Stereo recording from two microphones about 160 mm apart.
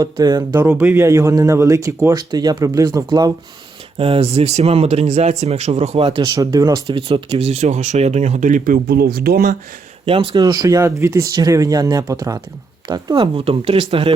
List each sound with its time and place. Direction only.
0.0 s speech: 25° right (ahead or behind)
0.5 s speech: 10° right (ahead or behind)
3.9 s speech: 35° right (ahead or behind)
6.2 s speech: 20° right (ahead or behind); by 9.6 s 75° right (ahead or behind)
10.1 s speech: 35° right (ahead or behind)
10.3 s speech: 20° right (ahead or behind)